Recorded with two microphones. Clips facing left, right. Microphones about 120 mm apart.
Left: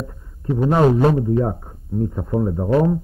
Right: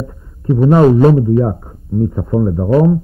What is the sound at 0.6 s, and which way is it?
Speech, 25° right (ahead or behind).